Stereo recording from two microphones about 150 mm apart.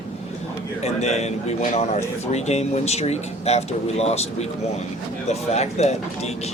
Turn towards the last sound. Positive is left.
turn(degrees=45)  # may be behind; listen again after turning